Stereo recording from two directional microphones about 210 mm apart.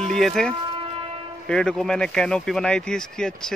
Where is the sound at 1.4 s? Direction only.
5° left (ahead or behind).